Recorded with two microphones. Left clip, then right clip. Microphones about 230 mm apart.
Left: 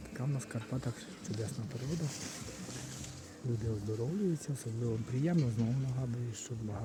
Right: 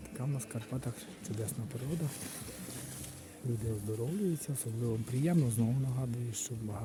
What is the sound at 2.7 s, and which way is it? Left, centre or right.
Vehicle, right.